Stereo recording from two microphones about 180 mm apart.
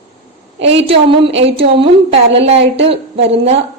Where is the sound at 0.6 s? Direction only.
35° right (ahead or behind).